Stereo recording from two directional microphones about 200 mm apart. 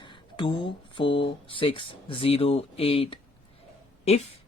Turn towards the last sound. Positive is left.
turn(degrees=30)  # may be behind; listen again after turning